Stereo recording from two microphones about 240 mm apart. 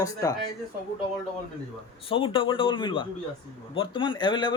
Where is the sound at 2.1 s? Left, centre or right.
Left.